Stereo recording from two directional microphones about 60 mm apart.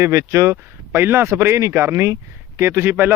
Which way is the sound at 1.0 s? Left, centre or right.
Right.